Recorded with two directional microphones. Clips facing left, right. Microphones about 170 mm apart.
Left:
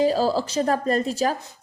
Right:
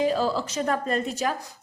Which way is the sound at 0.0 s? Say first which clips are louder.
Left 3 dB; 35° left (ahead or behind).